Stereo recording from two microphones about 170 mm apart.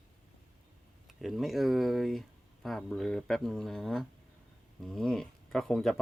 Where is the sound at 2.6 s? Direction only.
Centre (ahead or behind).